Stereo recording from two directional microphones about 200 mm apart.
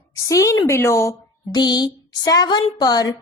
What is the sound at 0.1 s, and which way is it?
A woman's voice, 15° left (ahead or behind).